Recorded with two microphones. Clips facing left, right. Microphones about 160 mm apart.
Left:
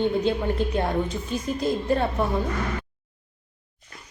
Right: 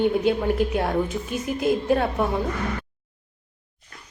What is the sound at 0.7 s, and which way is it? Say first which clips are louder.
A woman's voice: right 1 dB; centre (ahead or behind).